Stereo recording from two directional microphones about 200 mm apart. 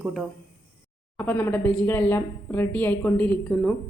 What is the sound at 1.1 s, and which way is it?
A woman's voice, 10° left (ahead or behind).